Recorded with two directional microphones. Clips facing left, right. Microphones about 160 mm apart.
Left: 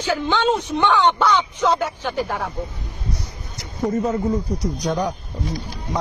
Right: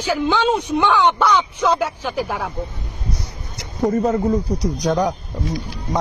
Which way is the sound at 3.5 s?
65° right (ahead or behind).